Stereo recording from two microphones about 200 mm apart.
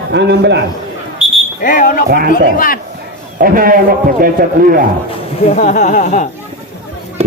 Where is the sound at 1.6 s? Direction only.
45° left (ahead or behind).